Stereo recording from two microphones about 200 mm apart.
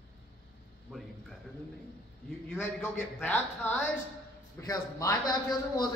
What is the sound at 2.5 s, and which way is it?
A man's voice, 10° left (ahead or behind).